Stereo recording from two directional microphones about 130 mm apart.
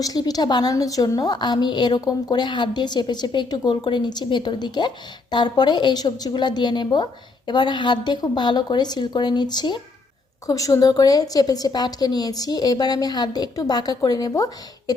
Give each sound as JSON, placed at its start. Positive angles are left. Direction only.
{"t": 0.0, "sound": "a woman's voice", "side_deg": 30}